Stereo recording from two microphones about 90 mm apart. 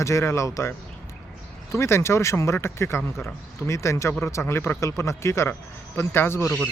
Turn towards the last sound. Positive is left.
turn(degrees=25)  # may be behind; listen again after turning